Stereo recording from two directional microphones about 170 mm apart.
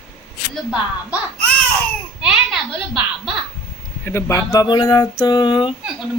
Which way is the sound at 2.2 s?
Centre (ahead or behind).